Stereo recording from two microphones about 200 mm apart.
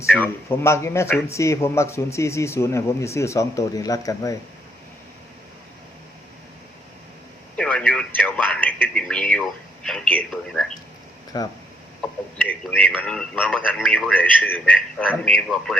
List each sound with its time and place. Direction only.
0.1 s a man's voice: 10° left (ahead or behind)
7.5 s speech: 5° left (ahead or behind)
11.3 s speech: 20° left (ahead or behind)
12.4 s a man's voice: 5° left (ahead or behind)